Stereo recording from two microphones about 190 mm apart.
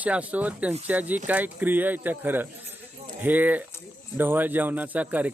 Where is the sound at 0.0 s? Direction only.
10° right (ahead or behind).